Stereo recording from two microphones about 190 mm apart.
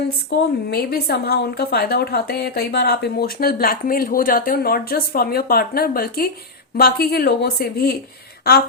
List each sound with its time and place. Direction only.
0.3 s a woman's voice: 55° left (ahead or behind)